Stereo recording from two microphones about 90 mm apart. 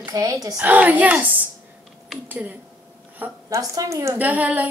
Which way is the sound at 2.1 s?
Centre (ahead or behind).